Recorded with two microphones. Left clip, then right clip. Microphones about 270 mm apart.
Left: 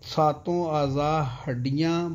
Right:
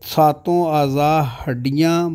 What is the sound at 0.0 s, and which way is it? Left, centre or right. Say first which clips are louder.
Speech: right 8 dB; right.